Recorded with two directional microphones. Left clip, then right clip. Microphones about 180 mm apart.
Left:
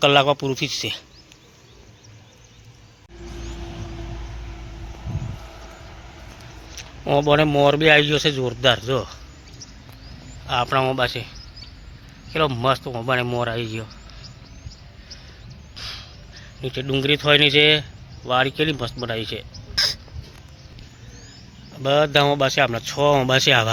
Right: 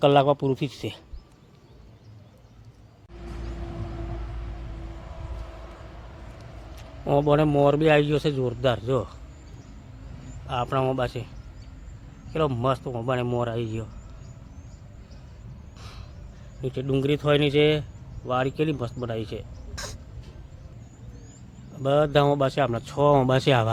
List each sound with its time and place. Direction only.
0.0 s speech: 15° right (ahead or behind)
6.7 s a man's voice: 5° right (ahead or behind)
10.4 s a man's voice: centre (ahead or behind)
16.6 s a man's voice: 5° right (ahead or behind)
21.8 s speech: 5° right (ahead or behind)